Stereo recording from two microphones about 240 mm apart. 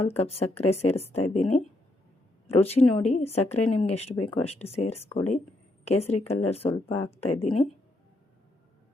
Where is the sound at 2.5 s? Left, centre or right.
Left.